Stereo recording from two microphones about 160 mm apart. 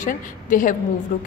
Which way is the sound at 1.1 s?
60° left (ahead or behind).